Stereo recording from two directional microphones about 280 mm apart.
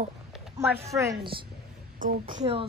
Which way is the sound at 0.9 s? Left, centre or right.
Centre.